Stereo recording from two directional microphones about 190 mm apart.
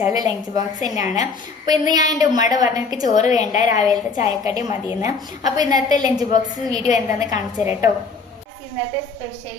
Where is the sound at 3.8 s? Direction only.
20° right (ahead or behind).